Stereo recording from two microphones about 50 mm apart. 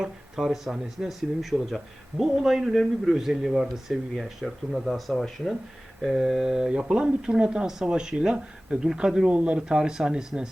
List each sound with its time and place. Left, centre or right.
0.0 s speech: centre